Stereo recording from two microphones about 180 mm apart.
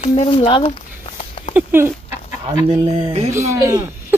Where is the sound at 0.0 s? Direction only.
35° left (ahead or behind).